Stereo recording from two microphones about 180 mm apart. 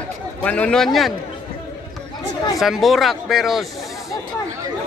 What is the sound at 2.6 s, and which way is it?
Speech, centre (ahead or behind).